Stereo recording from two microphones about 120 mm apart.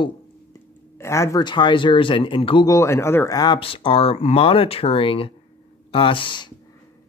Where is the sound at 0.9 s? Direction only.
25° left (ahead or behind).